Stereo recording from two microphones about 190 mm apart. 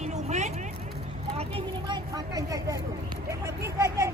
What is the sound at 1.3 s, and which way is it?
Speech, 30° right (ahead or behind).